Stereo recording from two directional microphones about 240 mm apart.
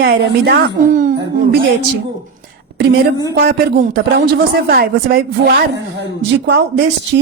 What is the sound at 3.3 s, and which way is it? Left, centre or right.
A woman's voice, right.